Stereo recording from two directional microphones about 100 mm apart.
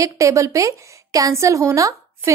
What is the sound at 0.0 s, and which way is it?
A woman's voice, 30° right (ahead or behind).